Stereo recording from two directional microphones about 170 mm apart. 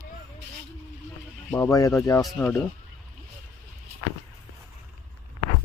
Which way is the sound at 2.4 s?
5° left (ahead or behind).